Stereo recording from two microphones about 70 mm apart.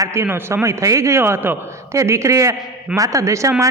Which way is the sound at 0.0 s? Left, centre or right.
Right.